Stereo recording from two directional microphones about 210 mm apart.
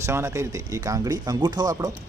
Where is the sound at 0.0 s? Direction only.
15° right (ahead or behind).